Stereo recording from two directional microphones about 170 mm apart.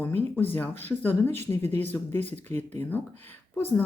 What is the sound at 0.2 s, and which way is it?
Speech, 10° left (ahead or behind).